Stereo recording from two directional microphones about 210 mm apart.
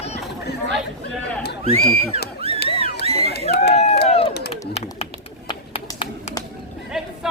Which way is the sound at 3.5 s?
50° left (ahead or behind).